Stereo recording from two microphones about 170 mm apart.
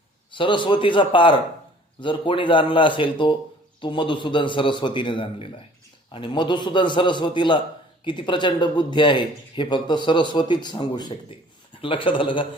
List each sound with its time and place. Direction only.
0.3 s speech: 30° left (ahead or behind)